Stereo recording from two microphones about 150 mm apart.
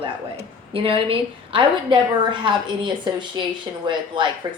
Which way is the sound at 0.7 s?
35° right (ahead or behind).